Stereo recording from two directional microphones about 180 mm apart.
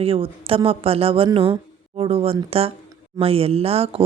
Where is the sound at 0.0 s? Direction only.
30° right (ahead or behind).